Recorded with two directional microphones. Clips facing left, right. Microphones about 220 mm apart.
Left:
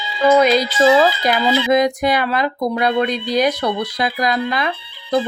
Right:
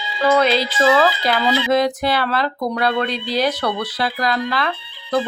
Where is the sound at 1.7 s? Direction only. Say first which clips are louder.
Left 2 dB; 15° left (ahead or behind).